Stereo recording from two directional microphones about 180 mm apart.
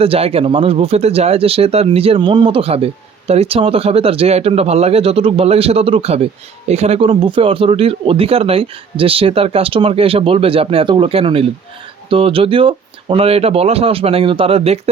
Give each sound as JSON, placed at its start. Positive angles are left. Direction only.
{"t": 0.0, "sound": "speech", "side_deg": -30}